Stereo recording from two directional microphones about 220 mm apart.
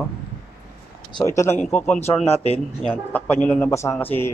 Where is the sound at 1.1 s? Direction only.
15° left (ahead or behind).